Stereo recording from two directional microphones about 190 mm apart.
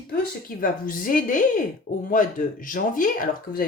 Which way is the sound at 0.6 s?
45° left (ahead or behind).